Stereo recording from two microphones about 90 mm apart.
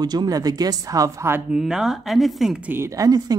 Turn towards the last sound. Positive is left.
turn(degrees=-40)  # may be behind; listen again after turning